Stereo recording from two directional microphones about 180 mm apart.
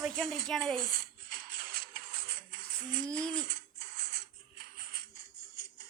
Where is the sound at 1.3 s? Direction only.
55° right (ahead or behind).